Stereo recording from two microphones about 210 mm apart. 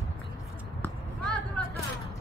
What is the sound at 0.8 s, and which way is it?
Basketball bounce, 5° left (ahead or behind).